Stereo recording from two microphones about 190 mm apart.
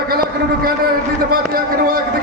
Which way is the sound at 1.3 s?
50° right (ahead or behind).